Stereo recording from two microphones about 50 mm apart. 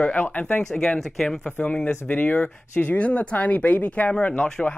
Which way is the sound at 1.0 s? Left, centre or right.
Centre.